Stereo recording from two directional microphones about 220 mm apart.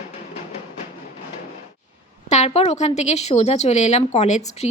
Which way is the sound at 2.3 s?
30° left (ahead or behind).